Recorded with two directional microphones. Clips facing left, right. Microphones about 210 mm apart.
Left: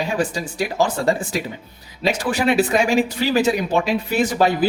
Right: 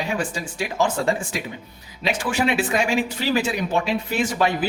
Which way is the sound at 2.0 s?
40° left (ahead or behind).